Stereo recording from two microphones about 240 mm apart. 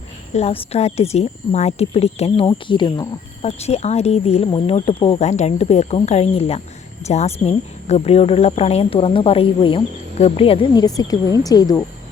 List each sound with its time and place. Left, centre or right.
0.3 s speech: left